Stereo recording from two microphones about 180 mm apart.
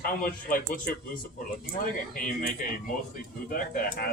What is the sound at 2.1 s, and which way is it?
Speech, 45° left (ahead or behind).